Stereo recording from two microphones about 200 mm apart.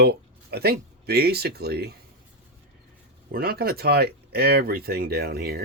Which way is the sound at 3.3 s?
50° right (ahead or behind).